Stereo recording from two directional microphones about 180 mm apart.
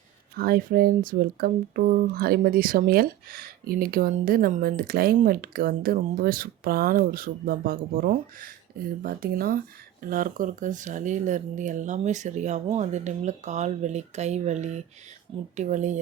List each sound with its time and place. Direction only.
0.3 s speech: 55° right (ahead or behind)